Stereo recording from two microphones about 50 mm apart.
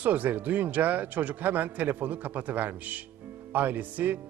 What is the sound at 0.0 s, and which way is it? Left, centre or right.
A man's voice, right.